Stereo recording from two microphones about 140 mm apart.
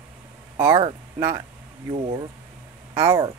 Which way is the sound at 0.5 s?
20° right (ahead or behind).